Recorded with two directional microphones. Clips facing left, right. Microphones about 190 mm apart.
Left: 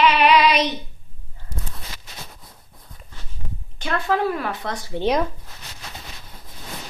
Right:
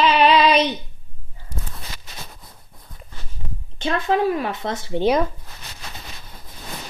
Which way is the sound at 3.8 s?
20° right (ahead or behind).